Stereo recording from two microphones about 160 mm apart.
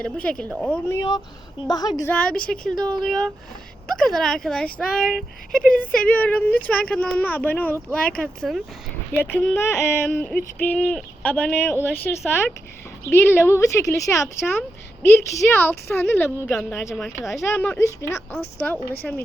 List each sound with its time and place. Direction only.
0.0 s speech: 5° left (ahead or behind)
0.9 s a woman's voice: 25° left (ahead or behind)
2.0 s speech: 5° left (ahead or behind)
16.6 s speech: centre (ahead or behind)
17.2 s speech: 15° left (ahead or behind)